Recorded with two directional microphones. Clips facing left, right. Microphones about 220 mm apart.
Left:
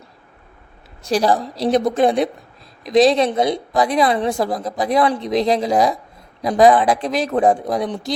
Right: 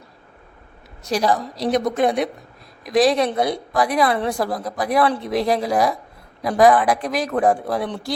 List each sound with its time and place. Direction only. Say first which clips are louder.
1.0 s a woman's voice: left 3 dB; 30° left (ahead or behind)